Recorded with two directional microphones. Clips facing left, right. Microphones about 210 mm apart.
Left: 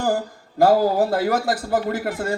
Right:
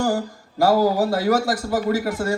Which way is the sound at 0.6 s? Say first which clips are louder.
Left 1 dB; 55° left (ahead or behind).